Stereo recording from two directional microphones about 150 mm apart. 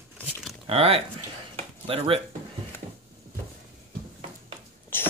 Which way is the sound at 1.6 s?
40° right (ahead or behind).